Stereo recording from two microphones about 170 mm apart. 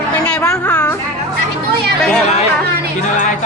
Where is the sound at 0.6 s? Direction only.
10° left (ahead or behind).